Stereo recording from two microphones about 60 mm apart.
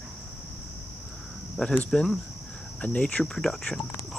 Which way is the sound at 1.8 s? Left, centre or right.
Centre.